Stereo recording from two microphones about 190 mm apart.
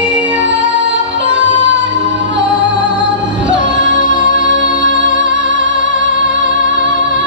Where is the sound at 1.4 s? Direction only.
75° right (ahead or behind).